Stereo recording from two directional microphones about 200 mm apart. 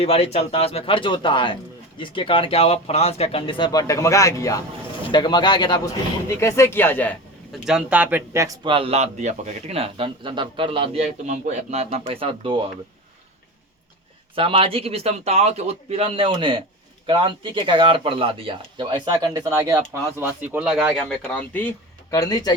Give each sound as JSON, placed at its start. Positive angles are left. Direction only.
{"t": 0.0, "sound": "a man's voice", "side_deg": 30}
{"t": 14.3, "sound": "a man's voice", "side_deg": -25}